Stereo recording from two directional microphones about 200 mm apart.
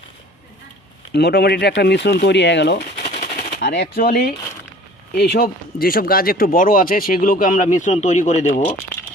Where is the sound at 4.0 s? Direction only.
45° left (ahead or behind).